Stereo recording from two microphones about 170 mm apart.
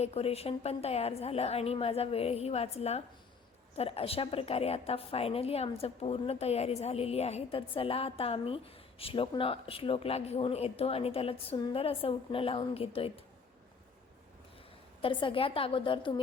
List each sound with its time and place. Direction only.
0.0 s a woman's voice: 35° left (ahead or behind)
15.0 s a woman's voice: 30° left (ahead or behind)